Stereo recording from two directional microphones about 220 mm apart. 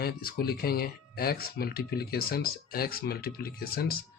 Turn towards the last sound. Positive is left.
turn(degrees=45)  # may be behind; listen again after turning